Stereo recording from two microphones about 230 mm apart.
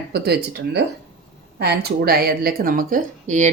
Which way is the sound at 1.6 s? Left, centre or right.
Right.